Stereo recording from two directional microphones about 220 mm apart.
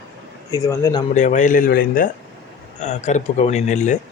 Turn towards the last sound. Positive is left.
turn(degrees=35)  # may be behind; listen again after turning